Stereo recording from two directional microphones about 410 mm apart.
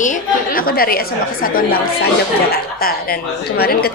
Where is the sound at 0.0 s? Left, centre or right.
Centre.